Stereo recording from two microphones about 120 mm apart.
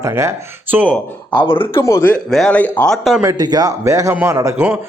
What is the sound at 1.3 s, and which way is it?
Speech, 45° left (ahead or behind).